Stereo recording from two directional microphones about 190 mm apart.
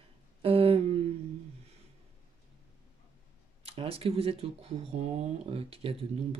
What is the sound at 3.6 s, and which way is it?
Speech, 30° right (ahead or behind).